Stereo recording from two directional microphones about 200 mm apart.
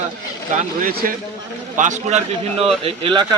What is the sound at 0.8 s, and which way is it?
A man's voice, 45° right (ahead or behind).